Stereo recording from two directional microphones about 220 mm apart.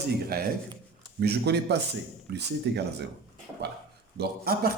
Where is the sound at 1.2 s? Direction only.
50° right (ahead or behind).